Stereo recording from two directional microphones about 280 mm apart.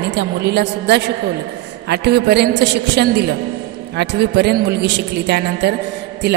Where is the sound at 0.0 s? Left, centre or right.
Right.